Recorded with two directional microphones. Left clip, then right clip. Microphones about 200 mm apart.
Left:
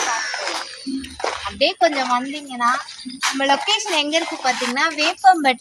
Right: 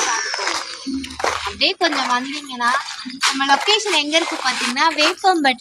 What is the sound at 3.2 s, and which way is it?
Speech, 10° right (ahead or behind).